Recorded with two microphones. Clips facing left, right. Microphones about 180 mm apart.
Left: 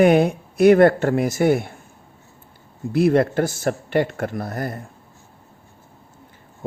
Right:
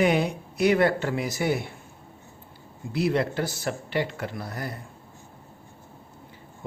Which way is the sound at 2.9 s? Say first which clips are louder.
Left 8 dB; 50° left (ahead or behind).